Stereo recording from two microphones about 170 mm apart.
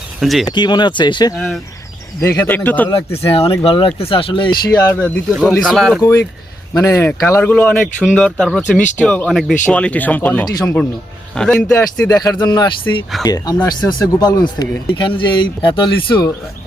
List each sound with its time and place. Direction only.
0.2 s speech: centre (ahead or behind)
0.4 s speech: 25° left (ahead or behind)
1.4 s speech: centre (ahead or behind)
2.2 s speech: 15° left (ahead or behind)
2.9 s speech: 35° left (ahead or behind)
4.9 s speech: 10° left (ahead or behind)
5.3 s speech: 10° right (ahead or behind)
6.0 s speech: 15° left (ahead or behind)
11.7 s speech: 20° left (ahead or behind)